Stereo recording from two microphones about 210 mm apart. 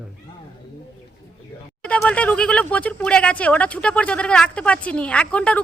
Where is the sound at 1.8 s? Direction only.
5° left (ahead or behind).